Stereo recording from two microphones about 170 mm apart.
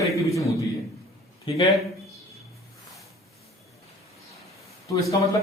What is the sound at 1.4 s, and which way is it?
Speech, 35° left (ahead or behind).